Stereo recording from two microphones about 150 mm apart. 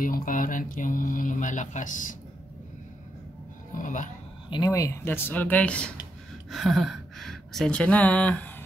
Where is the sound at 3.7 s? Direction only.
60° left (ahead or behind).